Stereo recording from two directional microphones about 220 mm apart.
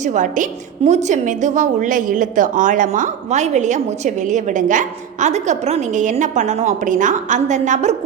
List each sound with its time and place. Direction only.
0.0 s a woman's voice: 35° right (ahead or behind)